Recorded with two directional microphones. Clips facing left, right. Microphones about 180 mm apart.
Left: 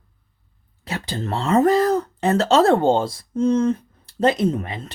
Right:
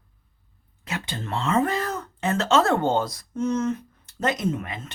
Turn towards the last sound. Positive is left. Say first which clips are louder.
# left 5 dB
turn(degrees=35)  # may be behind; listen again after turning